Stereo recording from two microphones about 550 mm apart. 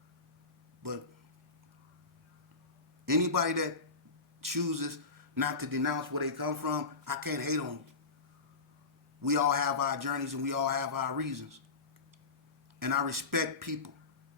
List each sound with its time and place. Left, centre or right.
3.1 s a man's voice: right
9.2 s a man's voice: right
12.8 s a man's voice: right